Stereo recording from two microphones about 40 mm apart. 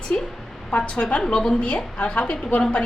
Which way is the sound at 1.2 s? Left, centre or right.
Left.